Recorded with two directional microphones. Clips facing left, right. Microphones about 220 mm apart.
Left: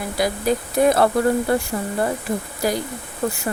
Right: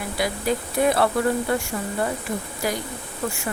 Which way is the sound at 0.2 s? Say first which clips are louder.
Left 4 dB; 40° left (ahead or behind).